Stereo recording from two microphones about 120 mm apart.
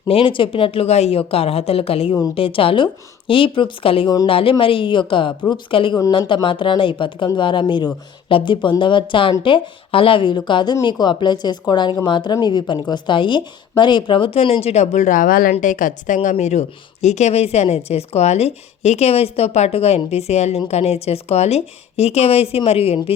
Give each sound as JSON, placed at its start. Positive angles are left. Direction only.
{"t": 0.1, "sound": "a woman's voice", "side_deg": 45}